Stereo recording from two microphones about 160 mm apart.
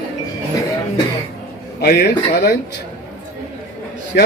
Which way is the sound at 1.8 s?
90° left.